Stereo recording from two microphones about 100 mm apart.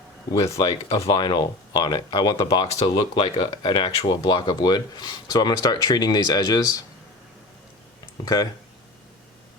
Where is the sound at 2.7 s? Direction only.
70° left (ahead or behind); by 6.8 s 40° left (ahead or behind).